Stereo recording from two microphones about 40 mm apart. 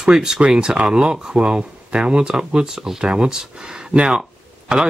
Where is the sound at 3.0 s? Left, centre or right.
Right.